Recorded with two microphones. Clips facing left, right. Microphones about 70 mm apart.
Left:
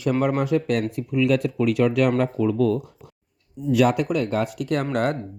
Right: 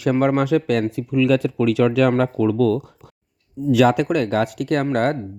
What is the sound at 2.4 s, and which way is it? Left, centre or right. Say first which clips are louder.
Speech: right 3 dB; right.